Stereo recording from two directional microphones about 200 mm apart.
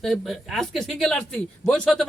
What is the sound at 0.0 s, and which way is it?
Speech, centre (ahead or behind).